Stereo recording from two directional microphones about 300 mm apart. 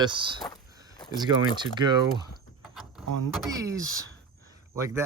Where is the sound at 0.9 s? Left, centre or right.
Centre.